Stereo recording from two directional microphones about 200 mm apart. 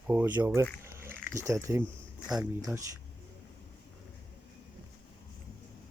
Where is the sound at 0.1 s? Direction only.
10° right (ahead or behind).